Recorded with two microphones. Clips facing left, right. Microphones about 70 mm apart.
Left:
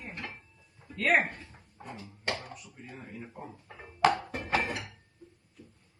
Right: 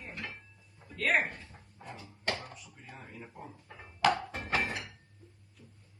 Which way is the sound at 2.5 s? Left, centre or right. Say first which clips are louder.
Left 4 dB; left.